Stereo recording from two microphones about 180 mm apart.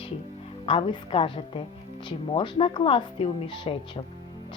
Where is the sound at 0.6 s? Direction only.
30° left (ahead or behind).